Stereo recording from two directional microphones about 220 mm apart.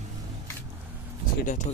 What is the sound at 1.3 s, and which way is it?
Speech, 35° left (ahead or behind).